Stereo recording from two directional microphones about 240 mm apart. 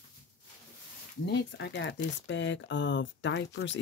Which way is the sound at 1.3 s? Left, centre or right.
Left.